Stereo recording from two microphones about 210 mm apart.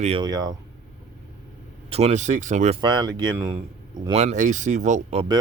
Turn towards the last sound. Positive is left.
turn(degrees=-35)  # may be behind; listen again after turning